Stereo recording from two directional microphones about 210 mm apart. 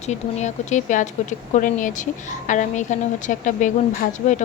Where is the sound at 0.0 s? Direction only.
35° left (ahead or behind).